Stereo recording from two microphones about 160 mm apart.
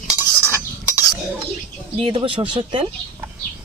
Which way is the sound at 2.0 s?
35° right (ahead or behind).